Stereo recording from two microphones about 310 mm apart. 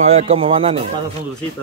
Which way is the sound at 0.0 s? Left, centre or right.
Right.